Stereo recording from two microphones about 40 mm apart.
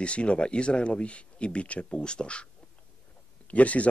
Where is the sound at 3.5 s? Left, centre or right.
Left.